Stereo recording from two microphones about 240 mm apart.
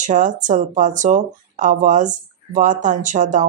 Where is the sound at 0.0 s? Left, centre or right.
Right.